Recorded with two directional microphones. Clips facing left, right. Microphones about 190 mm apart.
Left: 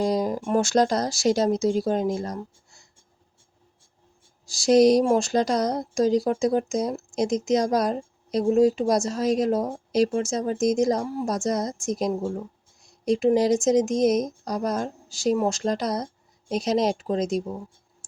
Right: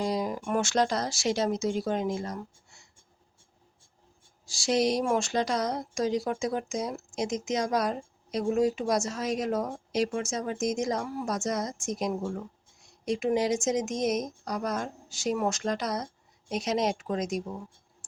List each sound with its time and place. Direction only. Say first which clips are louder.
0.0 s a woman's voice: left 6 dB; 40° left (ahead or behind)
4.4 s a woman's voice: left 9 dB; 40° left (ahead or behind)